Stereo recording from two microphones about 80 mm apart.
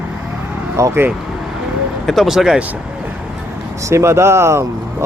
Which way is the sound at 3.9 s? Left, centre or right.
Right.